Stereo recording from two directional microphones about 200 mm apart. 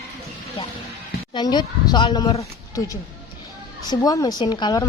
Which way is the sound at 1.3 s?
20° left (ahead or behind).